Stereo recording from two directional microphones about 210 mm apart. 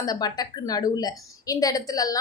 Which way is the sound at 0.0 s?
20° left (ahead or behind).